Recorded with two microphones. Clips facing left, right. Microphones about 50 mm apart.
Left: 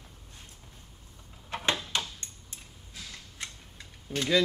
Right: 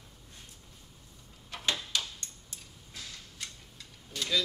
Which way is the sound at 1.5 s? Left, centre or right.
Left.